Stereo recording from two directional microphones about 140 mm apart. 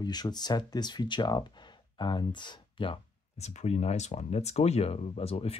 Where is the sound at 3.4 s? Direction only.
50° left (ahead or behind).